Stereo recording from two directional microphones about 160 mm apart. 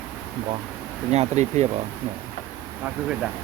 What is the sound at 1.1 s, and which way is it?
Speech, 45° right (ahead or behind).